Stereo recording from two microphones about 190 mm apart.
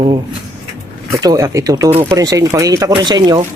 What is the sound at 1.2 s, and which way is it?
A man's voice, 15° right (ahead or behind).